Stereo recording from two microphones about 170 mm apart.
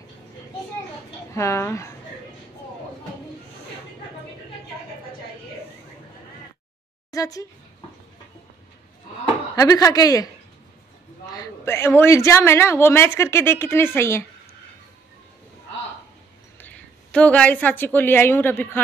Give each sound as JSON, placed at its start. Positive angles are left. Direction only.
{"t": 1.3, "sound": "a woman's voice", "side_deg": 15}
{"t": 7.1, "sound": "speech", "side_deg": 20}
{"t": 9.2, "sound": "speech", "side_deg": 20}
{"t": 11.3, "sound": "a woman's voice", "side_deg": 15}
{"t": 16.5, "sound": "a woman's voice", "side_deg": 10}